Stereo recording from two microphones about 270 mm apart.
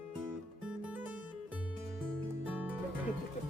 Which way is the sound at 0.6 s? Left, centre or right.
Centre.